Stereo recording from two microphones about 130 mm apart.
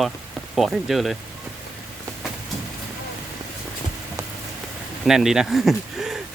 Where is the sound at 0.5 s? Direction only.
Centre (ahead or behind).